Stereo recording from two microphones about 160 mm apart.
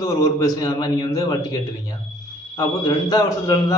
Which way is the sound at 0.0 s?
25° left (ahead or behind).